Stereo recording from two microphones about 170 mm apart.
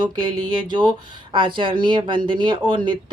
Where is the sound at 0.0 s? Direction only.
25° right (ahead or behind).